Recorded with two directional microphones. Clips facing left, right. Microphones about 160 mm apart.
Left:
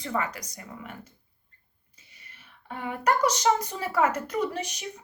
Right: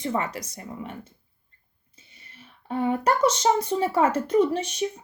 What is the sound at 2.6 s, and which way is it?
A woman's voice, 30° right (ahead or behind).